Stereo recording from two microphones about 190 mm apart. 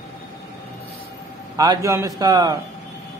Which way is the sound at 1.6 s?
15° right (ahead or behind).